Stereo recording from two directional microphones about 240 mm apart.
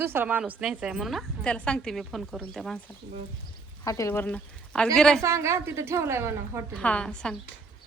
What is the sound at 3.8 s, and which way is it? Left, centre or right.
A woman's voice, centre.